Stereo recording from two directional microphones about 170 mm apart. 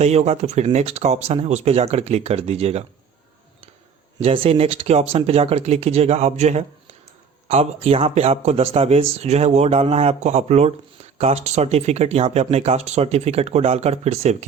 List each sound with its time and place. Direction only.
0.0 s speech: 40° right (ahead or behind)
4.2 s speech: 35° right (ahead or behind)